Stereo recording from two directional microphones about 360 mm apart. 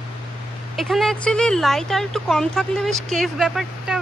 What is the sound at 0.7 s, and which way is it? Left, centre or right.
Speech, centre.